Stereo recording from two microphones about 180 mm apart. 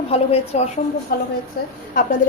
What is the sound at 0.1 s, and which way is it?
Speech, 35° left (ahead or behind).